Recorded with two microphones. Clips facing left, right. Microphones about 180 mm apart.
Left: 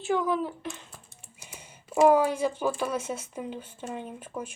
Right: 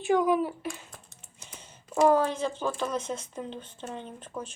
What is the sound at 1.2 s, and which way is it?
Speech, 10° left (ahead or behind).